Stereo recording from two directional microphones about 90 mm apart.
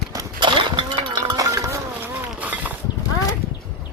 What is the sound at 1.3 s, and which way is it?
Chink, 40° right (ahead or behind).